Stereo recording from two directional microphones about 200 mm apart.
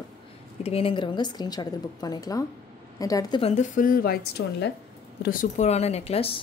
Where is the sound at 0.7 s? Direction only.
30° left (ahead or behind).